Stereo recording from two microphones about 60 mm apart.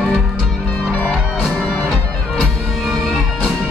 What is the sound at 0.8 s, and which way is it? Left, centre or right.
Music, left.